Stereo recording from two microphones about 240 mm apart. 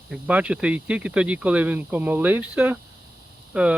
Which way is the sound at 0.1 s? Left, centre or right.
Centre.